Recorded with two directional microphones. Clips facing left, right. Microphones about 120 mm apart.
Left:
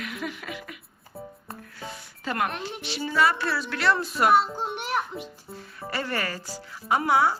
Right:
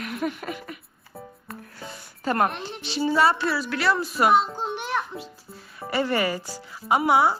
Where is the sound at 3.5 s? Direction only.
Centre (ahead or behind).